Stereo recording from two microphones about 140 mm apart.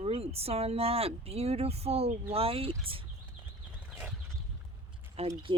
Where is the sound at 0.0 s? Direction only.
45° right (ahead or behind).